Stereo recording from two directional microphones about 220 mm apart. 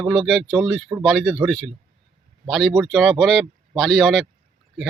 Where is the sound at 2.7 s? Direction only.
Centre (ahead or behind).